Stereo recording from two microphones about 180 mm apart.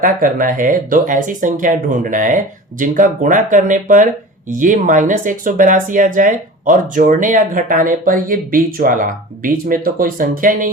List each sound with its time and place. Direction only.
0.0 s speech: 50° right (ahead or behind)